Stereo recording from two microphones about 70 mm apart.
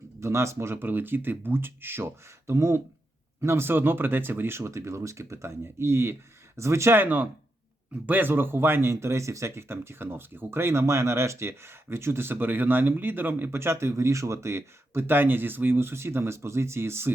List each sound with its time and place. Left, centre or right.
0.2 s speech: right